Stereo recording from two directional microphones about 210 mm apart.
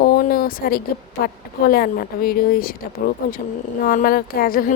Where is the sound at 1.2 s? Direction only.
45° left (ahead or behind).